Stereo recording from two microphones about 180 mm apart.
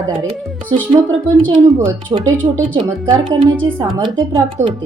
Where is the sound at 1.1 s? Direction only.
25° right (ahead or behind).